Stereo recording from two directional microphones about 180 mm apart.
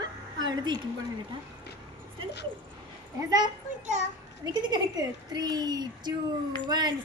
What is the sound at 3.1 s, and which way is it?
Speech, 20° right (ahead or behind).